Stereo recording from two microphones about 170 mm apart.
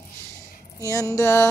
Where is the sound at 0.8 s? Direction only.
20° left (ahead or behind).